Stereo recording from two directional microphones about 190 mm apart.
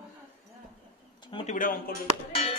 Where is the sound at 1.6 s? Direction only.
45° left (ahead or behind).